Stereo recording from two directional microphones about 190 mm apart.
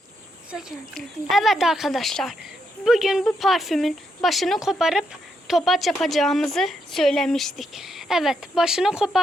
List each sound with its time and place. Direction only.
0.5 s a woman's voice: centre (ahead or behind)